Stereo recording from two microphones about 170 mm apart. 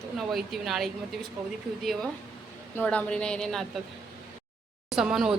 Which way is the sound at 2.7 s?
10° left (ahead or behind).